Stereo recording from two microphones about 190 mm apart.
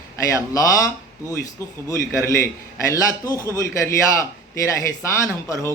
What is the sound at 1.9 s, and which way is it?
A man's voice, 15° left (ahead or behind).